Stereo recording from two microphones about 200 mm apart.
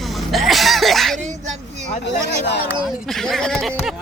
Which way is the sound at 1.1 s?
35° right (ahead or behind).